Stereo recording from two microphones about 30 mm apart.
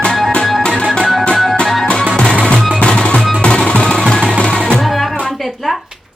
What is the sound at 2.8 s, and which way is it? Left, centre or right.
Music, left.